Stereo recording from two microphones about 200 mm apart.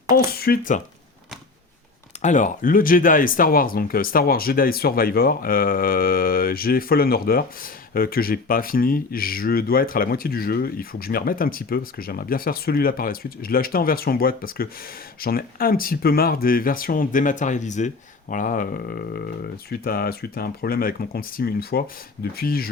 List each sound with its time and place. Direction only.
0.1 s speech: 50° left (ahead or behind)
2.2 s speech: 40° left (ahead or behind)